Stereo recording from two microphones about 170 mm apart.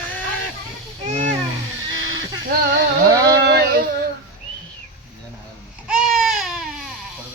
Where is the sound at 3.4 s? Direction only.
70° right (ahead or behind).